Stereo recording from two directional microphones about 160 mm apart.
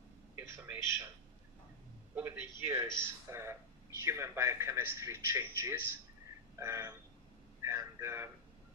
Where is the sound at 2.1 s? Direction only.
10° right (ahead or behind).